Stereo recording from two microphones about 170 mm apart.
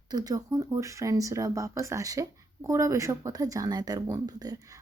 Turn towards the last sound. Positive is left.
turn(degrees=-20)  # may be behind; listen again after turning